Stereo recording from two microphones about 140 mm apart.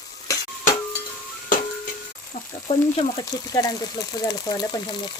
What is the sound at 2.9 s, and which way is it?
Speech, 30° left (ahead or behind).